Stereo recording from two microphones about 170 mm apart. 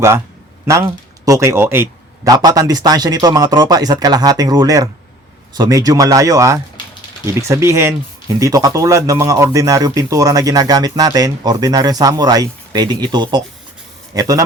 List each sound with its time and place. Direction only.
0.7 s speech: 15° right (ahead or behind)